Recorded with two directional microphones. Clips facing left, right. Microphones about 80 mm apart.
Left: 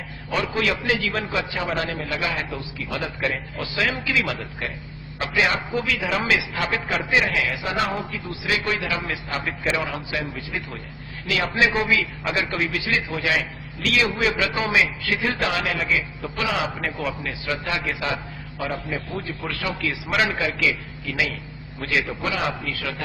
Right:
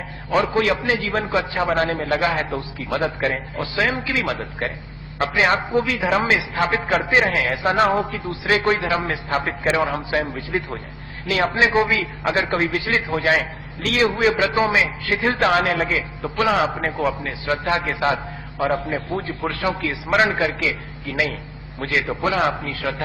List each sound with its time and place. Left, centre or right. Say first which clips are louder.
0.3 s a man's voice: right 5 dB; right